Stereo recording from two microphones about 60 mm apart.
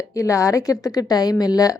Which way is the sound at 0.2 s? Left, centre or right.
Left.